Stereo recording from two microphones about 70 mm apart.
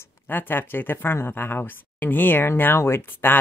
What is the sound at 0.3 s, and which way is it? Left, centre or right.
Speech, left.